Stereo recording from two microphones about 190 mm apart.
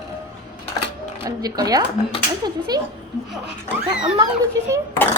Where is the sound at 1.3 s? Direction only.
20° right (ahead or behind).